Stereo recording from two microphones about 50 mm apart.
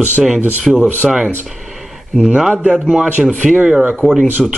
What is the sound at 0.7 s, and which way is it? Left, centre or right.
Speech, centre.